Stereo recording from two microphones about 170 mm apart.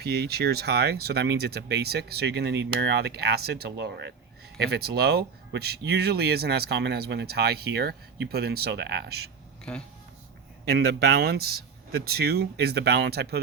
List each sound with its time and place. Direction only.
0.0 s speech: 70° right (ahead or behind)
4.5 s speech: 70° right (ahead or behind)
10.7 s speech: 70° right (ahead or behind)